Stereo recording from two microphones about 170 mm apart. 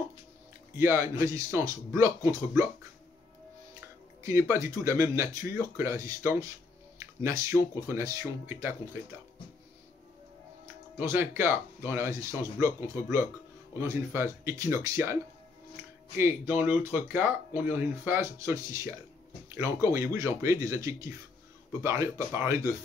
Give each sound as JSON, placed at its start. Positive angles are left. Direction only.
{"t": 0.7, "sound": "speech", "side_deg": -15}
{"t": 4.2, "sound": "speech", "side_deg": -15}
{"t": 11.0, "sound": "speech", "side_deg": -10}
{"t": 16.2, "sound": "speech", "side_deg": -10}